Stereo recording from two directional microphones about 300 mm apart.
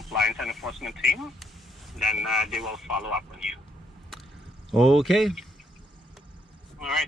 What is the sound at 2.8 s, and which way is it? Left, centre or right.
Speech, left.